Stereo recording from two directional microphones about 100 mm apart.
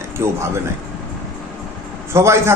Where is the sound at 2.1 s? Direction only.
25° right (ahead or behind).